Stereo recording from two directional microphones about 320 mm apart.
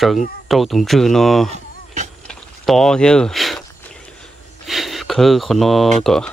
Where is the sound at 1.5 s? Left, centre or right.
Right.